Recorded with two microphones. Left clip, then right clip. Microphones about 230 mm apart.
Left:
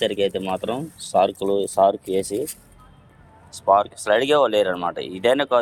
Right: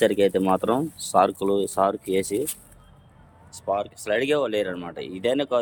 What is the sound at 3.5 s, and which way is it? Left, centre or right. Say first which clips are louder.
Speech: left 9 dB; centre.